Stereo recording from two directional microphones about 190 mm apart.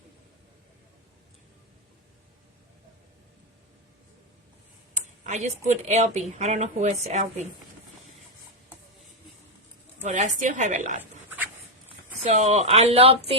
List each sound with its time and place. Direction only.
5.2 s a woman's voice: 40° right (ahead or behind)
10.0 s a woman's voice: 40° right (ahead or behind)
12.2 s a woman's voice: 35° right (ahead or behind)